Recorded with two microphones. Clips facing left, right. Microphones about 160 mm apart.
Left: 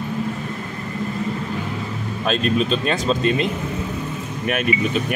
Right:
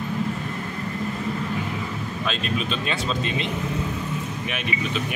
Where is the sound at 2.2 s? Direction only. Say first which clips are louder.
Left 8 dB; 40° left (ahead or behind).